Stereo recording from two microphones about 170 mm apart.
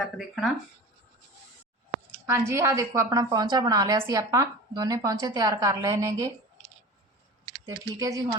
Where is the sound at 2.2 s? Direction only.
15° right (ahead or behind).